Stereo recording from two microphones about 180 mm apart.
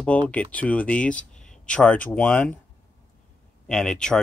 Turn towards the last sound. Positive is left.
turn(degrees=5)  # may be behind; listen again after turning